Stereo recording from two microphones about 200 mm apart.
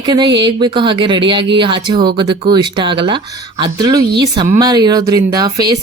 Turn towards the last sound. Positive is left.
turn(degrees=-20)  # may be behind; listen again after turning